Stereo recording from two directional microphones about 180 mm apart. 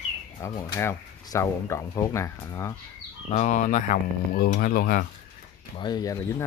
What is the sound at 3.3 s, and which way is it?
Speech, 40° left (ahead or behind).